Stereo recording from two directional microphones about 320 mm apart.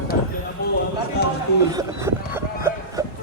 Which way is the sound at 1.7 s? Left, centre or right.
Centre.